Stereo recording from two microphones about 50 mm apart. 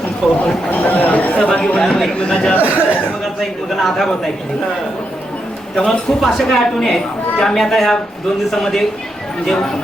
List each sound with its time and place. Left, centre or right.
0.2 s a man's voice: centre
0.7 s speech: left
1.5 s speech: left
1.8 s a woman's voice: centre
2.1 s speech: centre
2.6 s speech: right
3.8 s a man's voice: centre
5.8 s a woman's voice: centre